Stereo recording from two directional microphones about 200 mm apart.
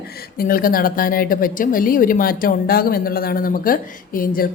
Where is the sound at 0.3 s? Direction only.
45° left (ahead or behind).